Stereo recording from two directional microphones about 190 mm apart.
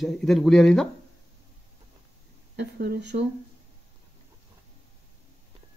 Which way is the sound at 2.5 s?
60° right (ahead or behind).